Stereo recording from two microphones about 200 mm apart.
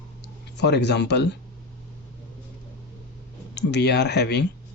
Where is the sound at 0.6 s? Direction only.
55° left (ahead or behind).